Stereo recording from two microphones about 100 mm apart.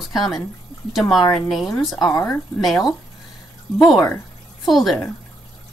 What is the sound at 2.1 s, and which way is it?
Speech, 30° left (ahead or behind).